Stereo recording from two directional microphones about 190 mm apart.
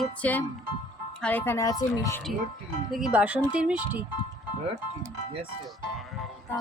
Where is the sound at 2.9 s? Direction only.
5° right (ahead or behind).